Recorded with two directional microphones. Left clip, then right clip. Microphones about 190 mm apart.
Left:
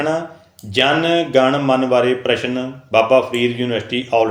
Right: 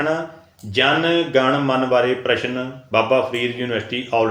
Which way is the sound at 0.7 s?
35° left (ahead or behind).